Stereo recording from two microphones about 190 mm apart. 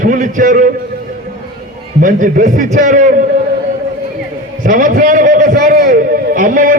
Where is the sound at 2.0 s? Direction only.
40° right (ahead or behind).